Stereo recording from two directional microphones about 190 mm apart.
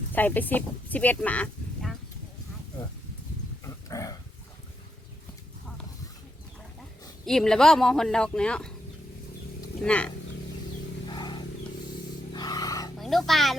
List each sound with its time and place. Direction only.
0.1 s speech: 10° left (ahead or behind)
3.6 s dog: 15° left (ahead or behind)
7.3 s speech: centre (ahead or behind)
9.8 s speech: 5° left (ahead or behind)
11.1 s a sound: 25° left (ahead or behind)
13.0 s speech: centre (ahead or behind)